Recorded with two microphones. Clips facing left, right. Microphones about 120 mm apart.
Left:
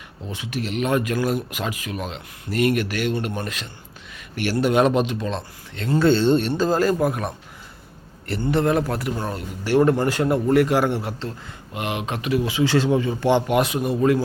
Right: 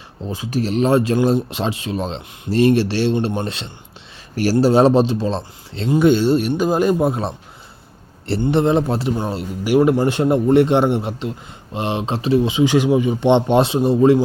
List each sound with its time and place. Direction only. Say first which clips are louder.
0.3 s speech: right 7 dB; 35° right (ahead or behind)
5.9 s speech: right 3 dB; 15° right (ahead or behind)
9.6 s speech: right 3 dB; 10° right (ahead or behind)
10.1 s speech: right 4 dB; 25° right (ahead or behind)